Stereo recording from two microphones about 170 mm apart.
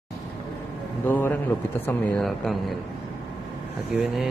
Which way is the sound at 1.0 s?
10° left (ahead or behind).